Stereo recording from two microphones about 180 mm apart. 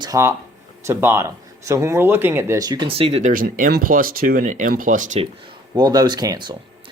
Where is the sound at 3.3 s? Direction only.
50° right (ahead or behind).